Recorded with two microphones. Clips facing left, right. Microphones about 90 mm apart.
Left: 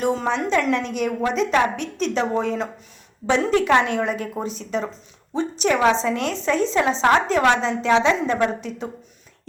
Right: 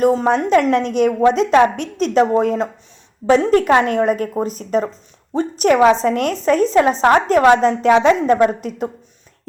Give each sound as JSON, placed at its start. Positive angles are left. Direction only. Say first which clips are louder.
{"t": 0.0, "sound": "a woman's voice", "louder": "right 7 dB", "side_deg": -40}